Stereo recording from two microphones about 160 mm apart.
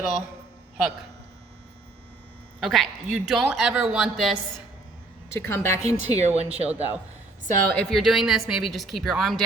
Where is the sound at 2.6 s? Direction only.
Centre (ahead or behind).